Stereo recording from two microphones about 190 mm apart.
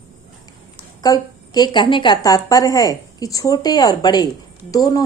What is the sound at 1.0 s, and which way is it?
A woman's voice, 20° left (ahead or behind).